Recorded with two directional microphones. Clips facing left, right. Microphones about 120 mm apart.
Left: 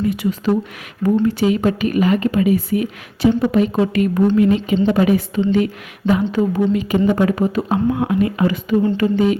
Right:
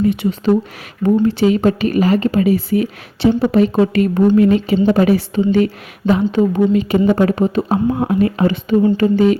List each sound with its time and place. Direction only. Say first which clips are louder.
0.1 s a woman's voice: right 3 dB; 25° right (ahead or behind)